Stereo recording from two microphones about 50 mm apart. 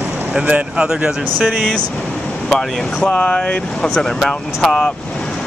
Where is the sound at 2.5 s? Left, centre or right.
Centre.